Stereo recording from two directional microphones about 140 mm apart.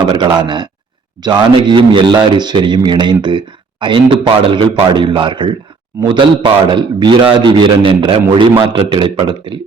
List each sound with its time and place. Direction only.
0.0 s speech: 35° right (ahead or behind)